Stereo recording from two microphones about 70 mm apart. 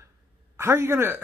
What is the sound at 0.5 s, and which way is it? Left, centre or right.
Speech, right.